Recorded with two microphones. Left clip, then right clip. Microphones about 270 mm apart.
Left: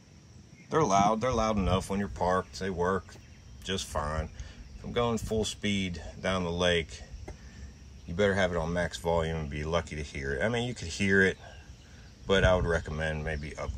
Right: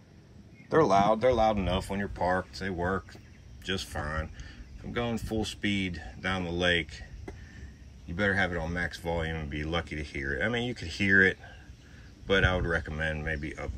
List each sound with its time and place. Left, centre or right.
0.7 s speech: centre
8.2 s speech: centre